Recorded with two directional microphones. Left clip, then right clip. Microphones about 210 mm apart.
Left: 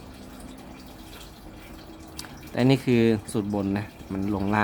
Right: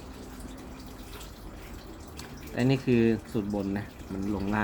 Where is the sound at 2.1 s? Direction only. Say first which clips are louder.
Left 5 dB; 20° left (ahead or behind).